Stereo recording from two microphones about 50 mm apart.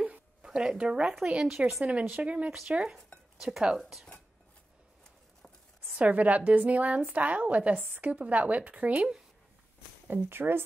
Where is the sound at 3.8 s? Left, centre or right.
Centre.